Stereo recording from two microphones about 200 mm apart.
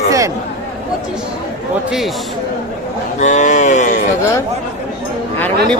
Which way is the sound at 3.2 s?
35° left (ahead or behind).